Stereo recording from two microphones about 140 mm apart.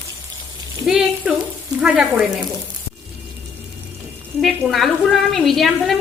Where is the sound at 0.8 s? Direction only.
5° right (ahead or behind).